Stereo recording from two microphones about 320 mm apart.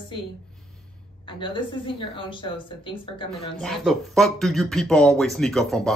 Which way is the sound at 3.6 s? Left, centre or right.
Centre.